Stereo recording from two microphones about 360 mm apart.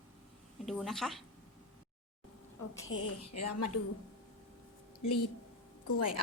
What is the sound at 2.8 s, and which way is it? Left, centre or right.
Speech, left.